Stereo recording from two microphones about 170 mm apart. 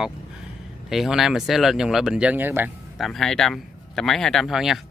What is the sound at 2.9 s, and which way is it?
Speech, centre (ahead or behind).